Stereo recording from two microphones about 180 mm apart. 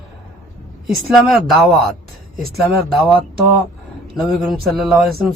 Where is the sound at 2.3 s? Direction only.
55° right (ahead or behind).